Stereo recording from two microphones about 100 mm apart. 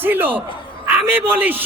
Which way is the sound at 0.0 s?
20° right (ahead or behind).